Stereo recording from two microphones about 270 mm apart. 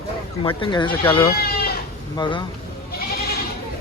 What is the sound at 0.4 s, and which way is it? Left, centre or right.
Speech, centre.